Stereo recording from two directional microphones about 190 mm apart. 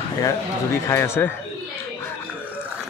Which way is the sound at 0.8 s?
15° left (ahead or behind).